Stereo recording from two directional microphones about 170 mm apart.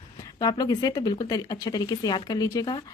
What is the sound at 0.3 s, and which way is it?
Speech, 25° left (ahead or behind).